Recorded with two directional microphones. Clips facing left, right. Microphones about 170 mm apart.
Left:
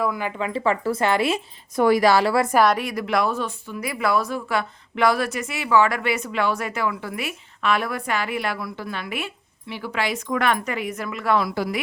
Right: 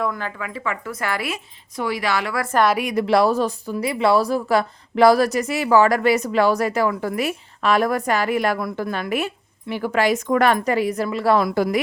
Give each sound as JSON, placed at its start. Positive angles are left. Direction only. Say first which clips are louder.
{"t": 0.0, "sound": "speech", "louder": "even", "side_deg": 10}
{"t": 0.3, "sound": "speech", "louder": "left 5 dB", "side_deg": 25}
{"t": 1.7, "sound": "speech", "louder": "left 7 dB", "side_deg": 50}
{"t": 2.5, "sound": "speech", "louder": "right 3 dB", "side_deg": 5}
{"t": 2.9, "sound": "speech", "louder": "right 6 dB", "side_deg": -30}